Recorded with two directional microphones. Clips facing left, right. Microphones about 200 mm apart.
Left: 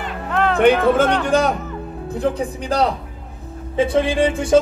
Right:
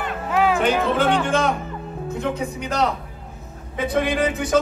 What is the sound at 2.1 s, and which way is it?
A man's voice, 35° left (ahead or behind).